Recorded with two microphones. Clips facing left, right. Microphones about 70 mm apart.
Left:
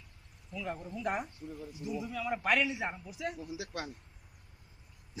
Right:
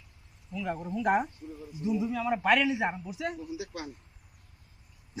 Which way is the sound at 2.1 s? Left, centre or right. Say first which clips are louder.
Right 3 dB; right.